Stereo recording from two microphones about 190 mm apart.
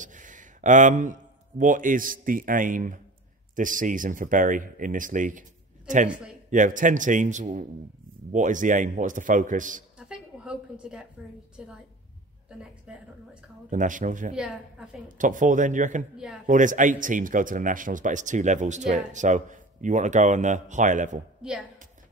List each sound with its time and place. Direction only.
0.0 s a sound: 40° right (ahead or behind)
1.6 s speech: 45° right (ahead or behind)
6.5 s speech: 45° right (ahead or behind)
9.9 s a woman's voice: 5° right (ahead or behind)
13.7 s speech: 40° right (ahead or behind)
14.3 s a woman's voice: 5° right (ahead or behind)
15.1 s a man's voice: 45° right (ahead or behind)
21.4 s a woman's voice: 5° right (ahead or behind)